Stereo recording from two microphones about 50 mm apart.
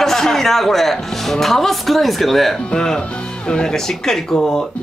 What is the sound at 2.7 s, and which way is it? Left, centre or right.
Speech, centre.